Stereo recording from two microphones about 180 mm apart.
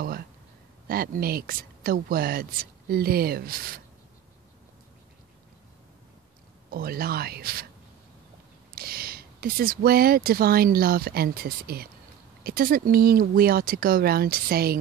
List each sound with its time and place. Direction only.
0.8 s speech: 55° right (ahead or behind)
6.7 s speech: 55° right (ahead or behind)
8.7 s speech: 55° right (ahead or behind)